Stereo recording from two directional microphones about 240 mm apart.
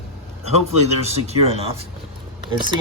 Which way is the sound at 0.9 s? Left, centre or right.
Right.